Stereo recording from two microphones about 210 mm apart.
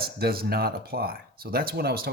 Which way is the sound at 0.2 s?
45° right (ahead or behind).